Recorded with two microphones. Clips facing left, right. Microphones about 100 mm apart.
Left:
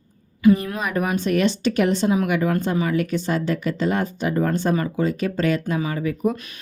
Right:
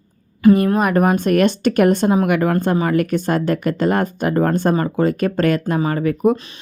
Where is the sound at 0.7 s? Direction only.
50° right (ahead or behind).